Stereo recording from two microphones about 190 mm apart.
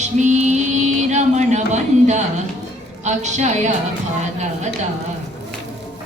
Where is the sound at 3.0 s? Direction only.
35° right (ahead or behind).